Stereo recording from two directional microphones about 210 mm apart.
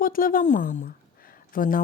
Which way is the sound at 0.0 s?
40° left (ahead or behind).